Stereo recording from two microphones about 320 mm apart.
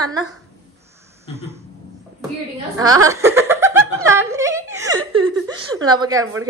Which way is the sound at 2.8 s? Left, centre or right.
Centre.